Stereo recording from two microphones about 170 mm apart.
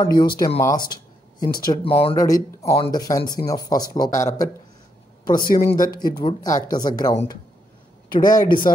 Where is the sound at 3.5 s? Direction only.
20° left (ahead or behind).